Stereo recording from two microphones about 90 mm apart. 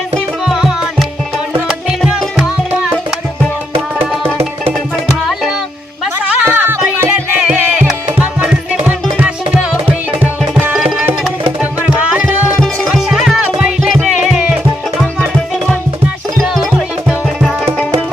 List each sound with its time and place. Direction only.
0.4 s music: 5° right (ahead or behind)
6.4 s music: 25° right (ahead or behind)
10.7 s music: 5° right (ahead or behind)
12.9 s music: 5° right (ahead or behind)